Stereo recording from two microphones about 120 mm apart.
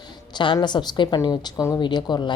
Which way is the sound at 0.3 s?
40° left (ahead or behind).